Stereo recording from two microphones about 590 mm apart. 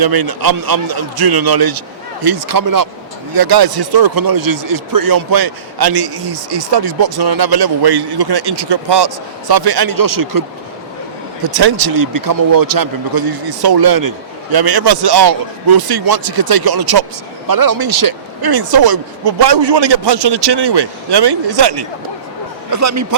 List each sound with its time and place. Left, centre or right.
0.0 s speech: right
11.4 s speech: right
22.7 s a man's voice: right